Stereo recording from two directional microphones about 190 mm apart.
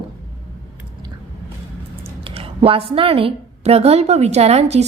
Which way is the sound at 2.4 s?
30° right (ahead or behind).